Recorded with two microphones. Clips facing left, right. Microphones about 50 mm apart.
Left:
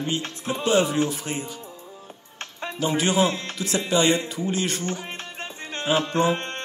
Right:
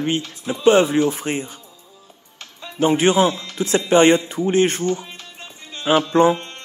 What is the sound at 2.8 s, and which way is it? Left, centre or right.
Speech, right.